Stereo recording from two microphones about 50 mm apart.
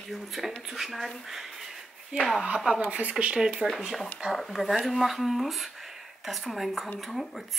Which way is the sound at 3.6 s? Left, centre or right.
Centre.